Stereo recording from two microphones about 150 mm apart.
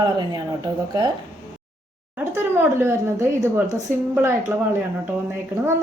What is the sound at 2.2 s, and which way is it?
Speech, 15° right (ahead or behind).